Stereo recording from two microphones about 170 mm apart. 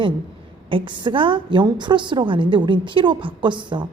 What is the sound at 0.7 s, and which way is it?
A woman's voice, 30° right (ahead or behind).